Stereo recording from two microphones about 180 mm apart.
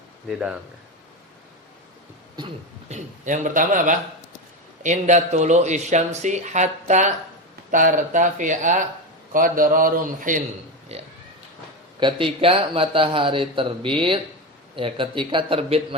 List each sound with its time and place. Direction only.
0.3 s speech: 5° right (ahead or behind)
2.9 s speech: 45° right (ahead or behind)
10.9 s a man's voice: 35° right (ahead or behind)